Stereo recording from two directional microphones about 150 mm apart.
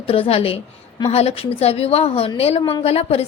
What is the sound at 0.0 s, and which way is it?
A woman's voice, 40° left (ahead or behind).